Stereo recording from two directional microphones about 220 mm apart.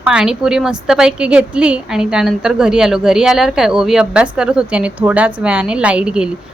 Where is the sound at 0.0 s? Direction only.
5° right (ahead or behind).